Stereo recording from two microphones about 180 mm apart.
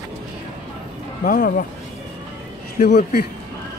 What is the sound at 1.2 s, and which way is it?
Speech, 50° left (ahead or behind).